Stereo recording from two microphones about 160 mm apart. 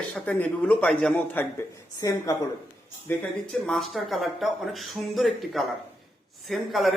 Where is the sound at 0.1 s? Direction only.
10° left (ahead or behind).